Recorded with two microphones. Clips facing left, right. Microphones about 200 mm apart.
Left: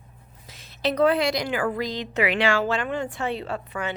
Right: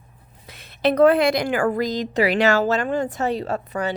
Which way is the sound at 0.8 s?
55° right (ahead or behind).